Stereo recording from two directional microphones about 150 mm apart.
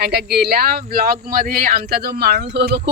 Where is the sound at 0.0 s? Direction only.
90° right.